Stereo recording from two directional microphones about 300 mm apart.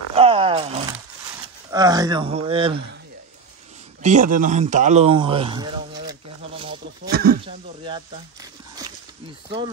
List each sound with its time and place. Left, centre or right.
0.1 s roaring cats: centre
1.7 s speech: centre
4.0 s a sound: right
7.1 s snake: right
7.4 s speech: centre